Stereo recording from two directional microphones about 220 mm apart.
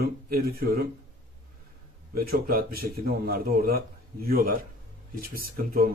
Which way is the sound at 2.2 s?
45° right (ahead or behind).